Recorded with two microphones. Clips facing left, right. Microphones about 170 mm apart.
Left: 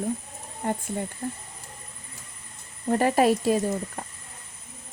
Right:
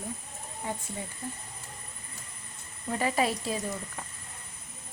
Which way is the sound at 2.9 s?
50° left (ahead or behind).